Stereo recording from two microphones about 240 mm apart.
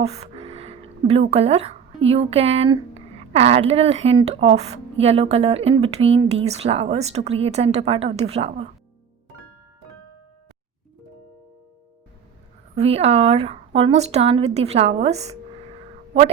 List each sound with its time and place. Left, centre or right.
0.1 s a sound: right
1.3 s speech: right
12.7 s speech: right